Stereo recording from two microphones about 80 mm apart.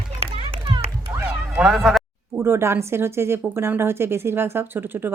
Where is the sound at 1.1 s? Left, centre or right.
Right.